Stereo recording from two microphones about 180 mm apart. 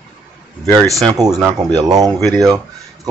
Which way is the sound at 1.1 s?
20° right (ahead or behind).